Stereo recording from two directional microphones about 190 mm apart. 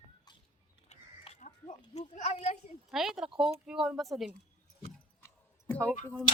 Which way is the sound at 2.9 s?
Centre (ahead or behind).